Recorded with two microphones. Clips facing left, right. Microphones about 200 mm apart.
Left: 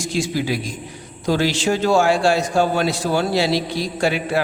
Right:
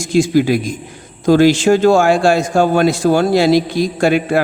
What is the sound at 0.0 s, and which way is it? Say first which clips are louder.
A man's voice: right 9 dB; 50° right (ahead or behind).